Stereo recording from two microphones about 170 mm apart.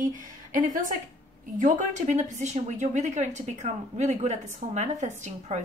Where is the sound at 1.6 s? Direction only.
50° right (ahead or behind).